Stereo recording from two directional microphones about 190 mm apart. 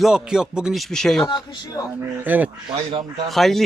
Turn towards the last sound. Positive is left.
turn(degrees=0)  # may be behind; listen again after turning